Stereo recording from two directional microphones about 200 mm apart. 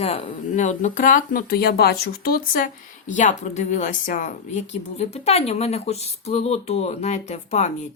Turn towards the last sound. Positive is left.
turn(degrees=35)  # may be behind; listen again after turning